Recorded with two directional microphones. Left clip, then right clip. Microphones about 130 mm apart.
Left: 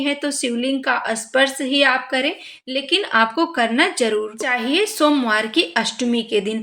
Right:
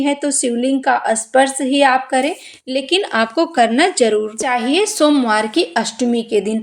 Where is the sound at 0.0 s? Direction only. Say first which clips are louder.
Right 4 dB; 35° right (ahead or behind).